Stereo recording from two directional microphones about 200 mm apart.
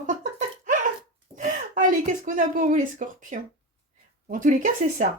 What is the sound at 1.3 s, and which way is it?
Speech, 40° right (ahead or behind).